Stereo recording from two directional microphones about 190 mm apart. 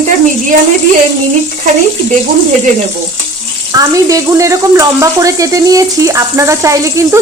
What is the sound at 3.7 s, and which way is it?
Speech, 15° right (ahead or behind).